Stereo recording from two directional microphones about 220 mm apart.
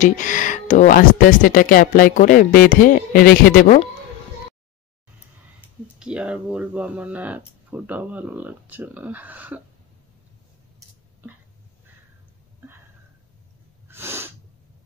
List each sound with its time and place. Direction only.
0.0 s speech: 35° left (ahead or behind)
5.9 s speech: 5° right (ahead or behind)
13.8 s sneeze: 10° right (ahead or behind)